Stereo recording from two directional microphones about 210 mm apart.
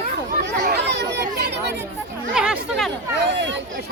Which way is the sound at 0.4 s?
50° right (ahead or behind).